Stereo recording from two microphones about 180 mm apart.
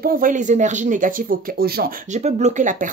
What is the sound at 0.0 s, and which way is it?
Speech, 50° right (ahead or behind).